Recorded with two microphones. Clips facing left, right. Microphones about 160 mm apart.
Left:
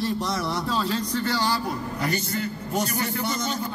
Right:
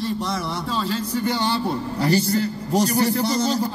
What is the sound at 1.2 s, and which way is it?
A man's voice, 20° right (ahead or behind).